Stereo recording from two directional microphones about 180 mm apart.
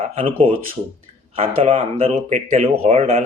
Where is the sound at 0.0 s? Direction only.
30° right (ahead or behind).